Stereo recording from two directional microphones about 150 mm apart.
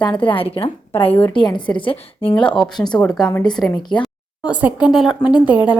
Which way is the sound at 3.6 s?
30° left (ahead or behind).